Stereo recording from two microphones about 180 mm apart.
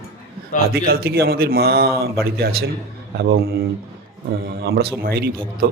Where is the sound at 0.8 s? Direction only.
60° right (ahead or behind).